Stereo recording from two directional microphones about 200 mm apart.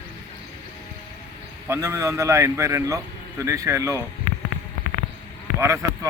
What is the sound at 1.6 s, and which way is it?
A man's voice, 15° right (ahead or behind).